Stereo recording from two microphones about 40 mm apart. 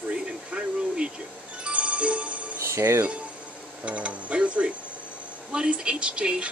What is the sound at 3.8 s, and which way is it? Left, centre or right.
Speech, right.